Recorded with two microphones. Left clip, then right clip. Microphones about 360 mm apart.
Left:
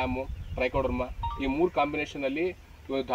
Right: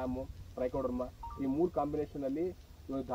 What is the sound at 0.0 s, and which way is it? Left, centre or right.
Speech, right.